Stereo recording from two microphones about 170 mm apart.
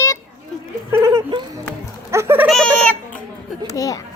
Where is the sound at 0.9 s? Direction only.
15° right (ahead or behind).